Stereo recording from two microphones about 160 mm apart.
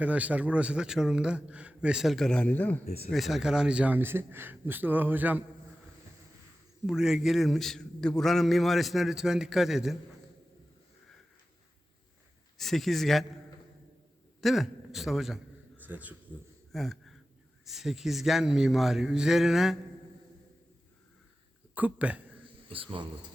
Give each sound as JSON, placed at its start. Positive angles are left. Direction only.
{"t": 0.0, "sound": "a man's voice", "side_deg": -10}
{"t": 3.1, "sound": "a man's voice", "side_deg": 0}
{"t": 6.8, "sound": "a man's voice", "side_deg": -5}
{"t": 12.5, "sound": "a man's voice", "side_deg": 0}
{"t": 14.4, "sound": "a man's voice", "side_deg": 0}
{"t": 16.7, "sound": "a sound", "side_deg": 0}
{"t": 17.7, "sound": "a man's voice", "side_deg": 0}
{"t": 21.8, "sound": "a man's voice", "side_deg": -10}
{"t": 22.7, "sound": "speech", "side_deg": -35}